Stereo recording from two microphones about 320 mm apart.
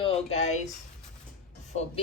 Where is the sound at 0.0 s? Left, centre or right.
Centre.